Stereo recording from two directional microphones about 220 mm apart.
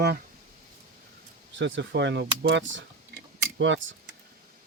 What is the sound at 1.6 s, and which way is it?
Speech, 55° right (ahead or behind).